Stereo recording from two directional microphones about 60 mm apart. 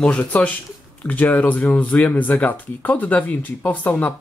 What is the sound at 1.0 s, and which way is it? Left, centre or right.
Speech, left.